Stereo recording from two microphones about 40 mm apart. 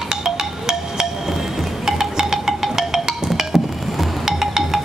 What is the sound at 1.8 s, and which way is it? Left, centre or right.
Wind chime, centre.